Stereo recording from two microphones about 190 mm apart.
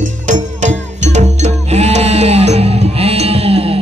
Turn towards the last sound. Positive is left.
turn(degrees=-30)  # may be behind; listen again after turning